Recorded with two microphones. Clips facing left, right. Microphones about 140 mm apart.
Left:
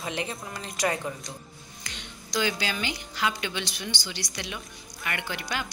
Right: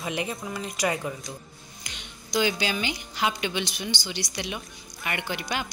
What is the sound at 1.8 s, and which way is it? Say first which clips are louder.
A woman's voice: left 2 dB; 15° right (ahead or behind).